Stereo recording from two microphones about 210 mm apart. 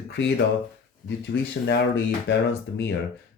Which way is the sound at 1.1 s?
55° left (ahead or behind).